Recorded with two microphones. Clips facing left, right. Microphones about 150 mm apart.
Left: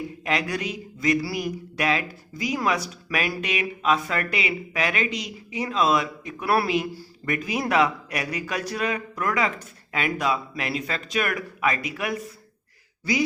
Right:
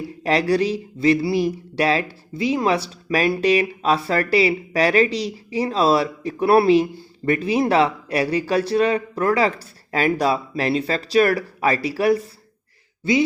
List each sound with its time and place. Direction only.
0.2 s a man's voice: 35° right (ahead or behind)